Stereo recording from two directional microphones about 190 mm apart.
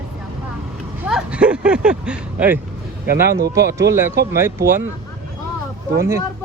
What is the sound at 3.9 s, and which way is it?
Speech, 15° right (ahead or behind).